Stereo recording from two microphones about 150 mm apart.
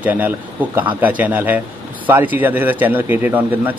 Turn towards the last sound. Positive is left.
turn(degrees=-10)  # may be behind; listen again after turning